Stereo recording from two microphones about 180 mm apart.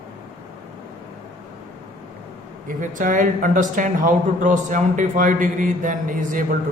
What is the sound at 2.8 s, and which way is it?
Speech, 45° right (ahead or behind).